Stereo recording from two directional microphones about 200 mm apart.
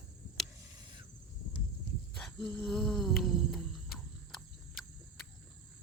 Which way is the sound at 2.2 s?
5° left (ahead or behind).